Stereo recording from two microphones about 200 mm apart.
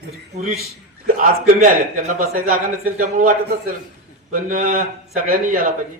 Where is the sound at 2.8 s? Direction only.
40° right (ahead or behind).